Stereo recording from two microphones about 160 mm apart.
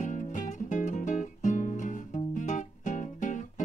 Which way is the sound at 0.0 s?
50° left (ahead or behind).